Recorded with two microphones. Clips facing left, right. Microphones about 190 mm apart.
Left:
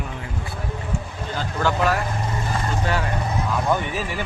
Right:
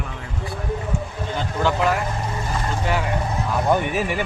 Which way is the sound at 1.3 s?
20° right (ahead or behind).